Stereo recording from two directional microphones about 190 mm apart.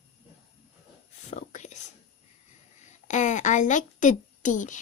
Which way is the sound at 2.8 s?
40° left (ahead or behind).